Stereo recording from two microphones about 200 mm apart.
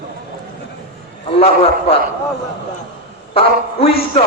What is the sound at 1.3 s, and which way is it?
Speech, 30° left (ahead or behind).